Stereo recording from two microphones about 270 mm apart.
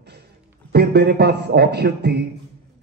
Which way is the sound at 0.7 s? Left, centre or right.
Right.